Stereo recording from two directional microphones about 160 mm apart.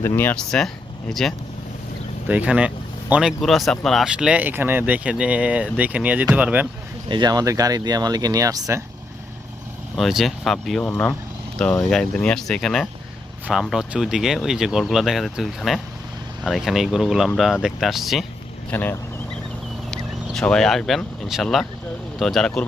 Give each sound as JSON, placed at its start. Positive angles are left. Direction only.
{"t": 0.0, "sound": "speech", "side_deg": 15}
{"t": 2.2, "sound": "speech", "side_deg": -10}
{"t": 7.1, "sound": "speech", "side_deg": -25}
{"t": 10.0, "sound": "speech", "side_deg": 0}
{"t": 18.7, "sound": "speech", "side_deg": 10}
{"t": 20.2, "sound": "speech", "side_deg": 5}